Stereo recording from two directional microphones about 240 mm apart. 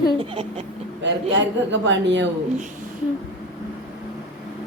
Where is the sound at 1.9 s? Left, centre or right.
Right.